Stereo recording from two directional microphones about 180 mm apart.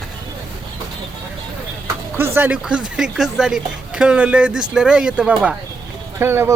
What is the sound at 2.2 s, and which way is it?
Speech, 10° right (ahead or behind).